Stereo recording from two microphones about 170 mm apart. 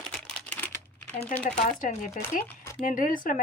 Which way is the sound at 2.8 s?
50° left (ahead or behind).